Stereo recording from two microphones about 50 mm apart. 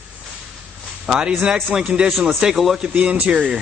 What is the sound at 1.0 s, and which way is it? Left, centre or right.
A man's voice, centre.